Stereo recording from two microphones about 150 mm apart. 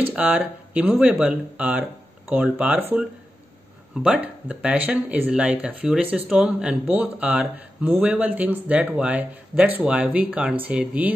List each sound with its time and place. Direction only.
0.1 s speech: 10° right (ahead or behind)